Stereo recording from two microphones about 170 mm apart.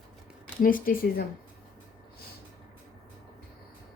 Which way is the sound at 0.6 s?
55° left (ahead or behind).